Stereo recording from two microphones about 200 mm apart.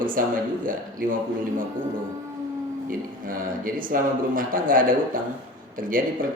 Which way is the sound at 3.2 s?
45° right (ahead or behind).